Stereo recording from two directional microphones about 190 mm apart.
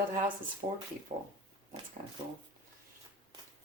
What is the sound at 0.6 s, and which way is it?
Speech, 40° right (ahead or behind).